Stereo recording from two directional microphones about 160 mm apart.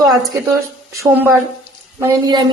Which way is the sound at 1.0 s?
15° right (ahead or behind).